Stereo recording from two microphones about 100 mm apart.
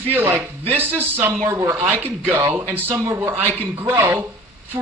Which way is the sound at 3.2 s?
20° right (ahead or behind).